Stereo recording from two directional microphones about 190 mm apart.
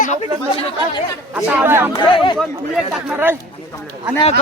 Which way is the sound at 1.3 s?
10° right (ahead or behind).